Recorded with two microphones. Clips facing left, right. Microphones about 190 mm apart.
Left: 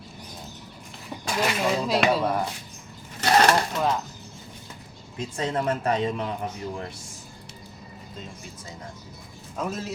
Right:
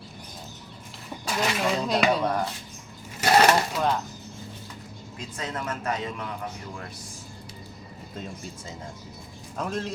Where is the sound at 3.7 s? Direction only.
Centre (ahead or behind).